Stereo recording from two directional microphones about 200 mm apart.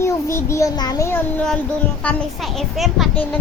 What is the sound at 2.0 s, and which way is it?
A child's voice, 5° left (ahead or behind).